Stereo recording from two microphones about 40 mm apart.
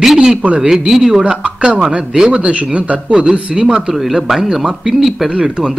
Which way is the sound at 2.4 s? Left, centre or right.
Right.